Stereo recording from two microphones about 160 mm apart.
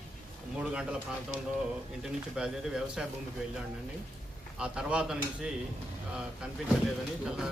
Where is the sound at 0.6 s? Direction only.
5° right (ahead or behind).